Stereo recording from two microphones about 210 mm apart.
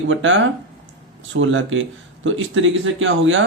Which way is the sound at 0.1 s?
65° right (ahead or behind).